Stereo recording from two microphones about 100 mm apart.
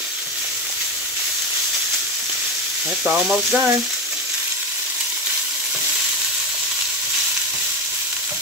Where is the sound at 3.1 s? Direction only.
15° right (ahead or behind).